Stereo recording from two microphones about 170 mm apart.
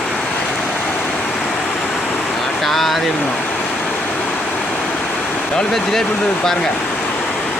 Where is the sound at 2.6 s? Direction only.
Centre (ahead or behind).